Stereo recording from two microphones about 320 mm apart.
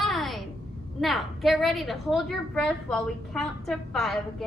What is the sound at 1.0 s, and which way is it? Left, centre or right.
A woman's voice, centre.